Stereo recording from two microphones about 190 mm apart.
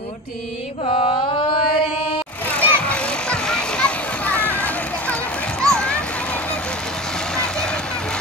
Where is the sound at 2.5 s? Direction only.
10° left (ahead or behind).